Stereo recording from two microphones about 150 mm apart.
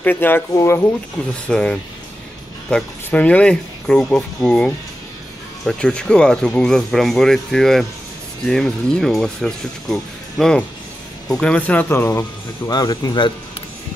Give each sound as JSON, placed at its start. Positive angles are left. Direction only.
{"t": 0.0, "sound": "speech", "side_deg": 15}
{"t": 1.5, "sound": "speech", "side_deg": 5}
{"t": 12.6, "sound": "speech", "side_deg": 25}